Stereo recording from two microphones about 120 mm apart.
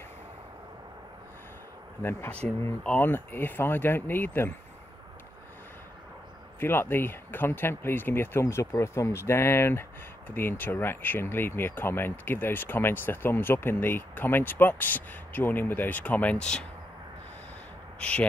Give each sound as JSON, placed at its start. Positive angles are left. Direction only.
{"t": 2.0, "sound": "speech", "side_deg": 20}
{"t": 6.6, "sound": "speech", "side_deg": 20}
{"t": 17.9, "sound": "speech", "side_deg": 10}